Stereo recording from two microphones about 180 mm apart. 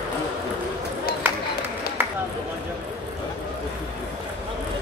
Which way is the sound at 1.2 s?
10° right (ahead or behind).